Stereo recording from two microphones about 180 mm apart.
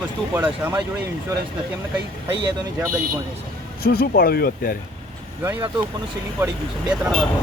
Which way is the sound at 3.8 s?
55° left (ahead or behind).